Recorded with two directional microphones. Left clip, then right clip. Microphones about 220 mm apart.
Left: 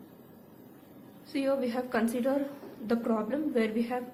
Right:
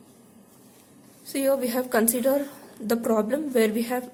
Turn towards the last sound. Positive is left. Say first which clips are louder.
# right 7 dB
turn(degrees=-50)  # may be behind; listen again after turning